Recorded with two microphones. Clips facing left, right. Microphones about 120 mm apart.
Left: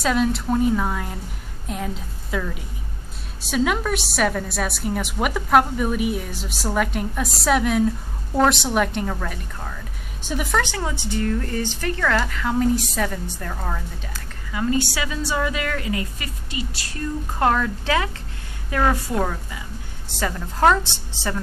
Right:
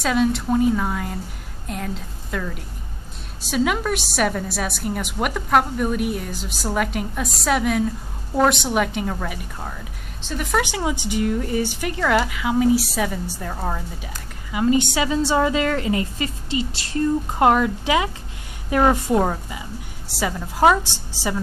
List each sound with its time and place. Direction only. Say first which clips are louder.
0.0 s a woman's voice: right 1 dB; centre (ahead or behind)
10.2 s a woman's voice: left 2 dB; 5° left (ahead or behind)
10.5 s a woman's voice: right 4 dB; 15° right (ahead or behind)
20.2 s speech: right 2 dB; 10° right (ahead or behind)